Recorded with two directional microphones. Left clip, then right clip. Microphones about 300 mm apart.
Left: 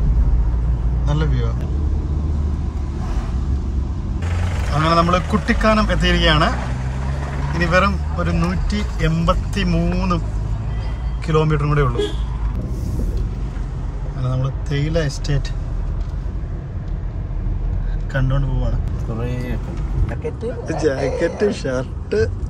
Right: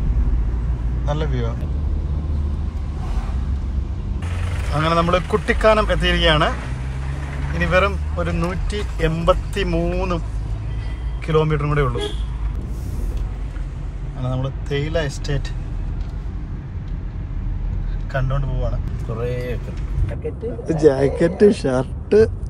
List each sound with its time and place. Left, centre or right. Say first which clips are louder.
1.0 s speech: right 1 dB; centre
4.7 s speech: left 2 dB; centre
7.5 s speech: left 1 dB; centre
11.2 s speech: even; centre
14.2 s speech: even; centre
20.6 s speech: right 5 dB; centre